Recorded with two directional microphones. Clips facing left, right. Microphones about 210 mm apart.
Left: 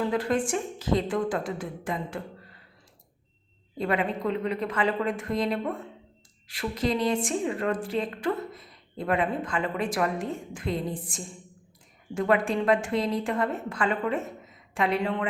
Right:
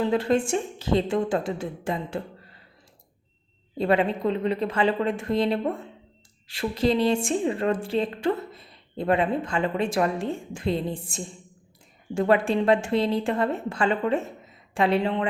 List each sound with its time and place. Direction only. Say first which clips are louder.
0.0 s a woman's voice: right 3 dB; 25° right (ahead or behind)
3.8 s a woman's voice: right 5 dB; 30° right (ahead or behind)